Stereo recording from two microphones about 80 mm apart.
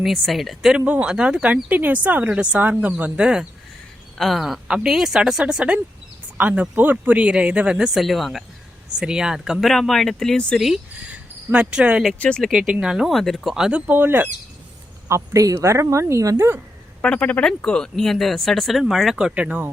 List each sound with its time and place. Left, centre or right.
0.0 s speech: centre
0.9 s speech: centre
4.2 s speech: centre
10.6 s speech: centre; by 14.3 s right
15.0 s speech: right
17.0 s speech: centre
19.3 s speech: centre